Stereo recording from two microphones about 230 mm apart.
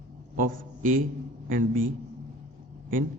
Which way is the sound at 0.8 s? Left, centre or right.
Right.